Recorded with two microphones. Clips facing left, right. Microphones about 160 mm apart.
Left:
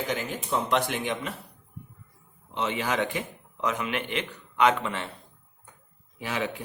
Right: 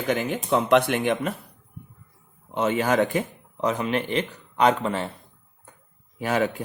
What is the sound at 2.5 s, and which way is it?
Speech, 45° right (ahead or behind).